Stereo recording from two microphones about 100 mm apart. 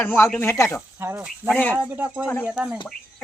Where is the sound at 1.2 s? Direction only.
10° right (ahead or behind).